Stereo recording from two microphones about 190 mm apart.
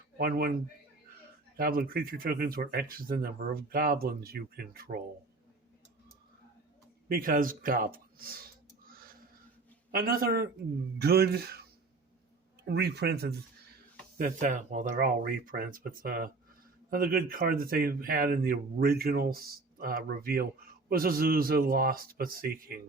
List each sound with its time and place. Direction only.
0.2 s speech: 50° right (ahead or behind)
1.5 s speech: 50° right (ahead or behind)
7.1 s speech: 45° right (ahead or behind)
8.9 s a sound: 50° right (ahead or behind)
9.9 s speech: 50° right (ahead or behind)
12.6 s speech: 60° right (ahead or behind)
14.2 s speech: 45° right (ahead or behind)